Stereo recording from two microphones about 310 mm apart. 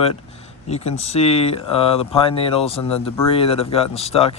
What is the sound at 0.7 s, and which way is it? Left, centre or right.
Speech, centre.